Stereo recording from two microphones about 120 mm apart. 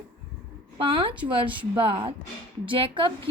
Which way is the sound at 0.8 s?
50° right (ahead or behind).